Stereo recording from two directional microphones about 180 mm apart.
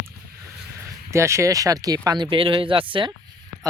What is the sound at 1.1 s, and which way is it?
Speech, 15° right (ahead or behind).